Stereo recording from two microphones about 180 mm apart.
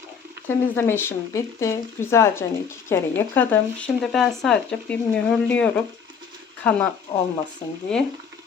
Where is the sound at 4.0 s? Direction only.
Centre (ahead or behind).